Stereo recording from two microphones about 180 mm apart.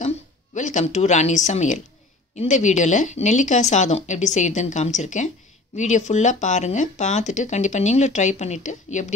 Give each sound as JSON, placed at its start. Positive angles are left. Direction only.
{"t": 0.6, "sound": "speech", "side_deg": 40}